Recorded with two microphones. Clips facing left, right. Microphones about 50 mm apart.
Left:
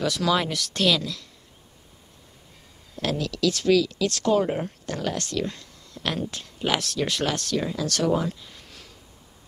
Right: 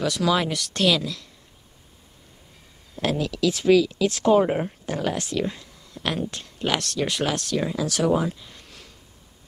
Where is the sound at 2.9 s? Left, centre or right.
Centre.